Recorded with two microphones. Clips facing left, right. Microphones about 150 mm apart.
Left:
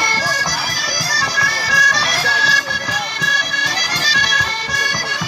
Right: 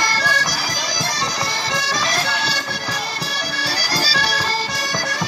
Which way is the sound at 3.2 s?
35° right (ahead or behind).